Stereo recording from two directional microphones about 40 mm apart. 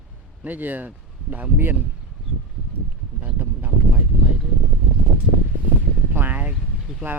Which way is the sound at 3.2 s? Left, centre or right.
Right.